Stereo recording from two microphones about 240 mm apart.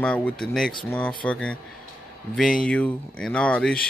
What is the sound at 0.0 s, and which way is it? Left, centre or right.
Speech, centre.